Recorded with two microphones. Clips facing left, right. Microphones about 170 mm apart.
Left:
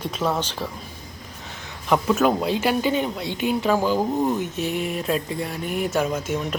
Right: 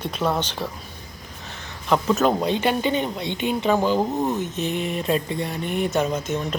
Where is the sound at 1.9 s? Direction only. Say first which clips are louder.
Even; 10° left (ahead or behind).